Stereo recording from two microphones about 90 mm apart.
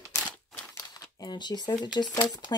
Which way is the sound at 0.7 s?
45° left (ahead or behind).